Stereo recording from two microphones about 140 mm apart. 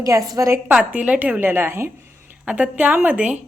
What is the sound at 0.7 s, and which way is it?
A woman's voice, 10° right (ahead or behind).